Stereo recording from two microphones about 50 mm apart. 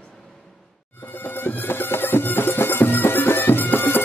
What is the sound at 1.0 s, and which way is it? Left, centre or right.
Music, left.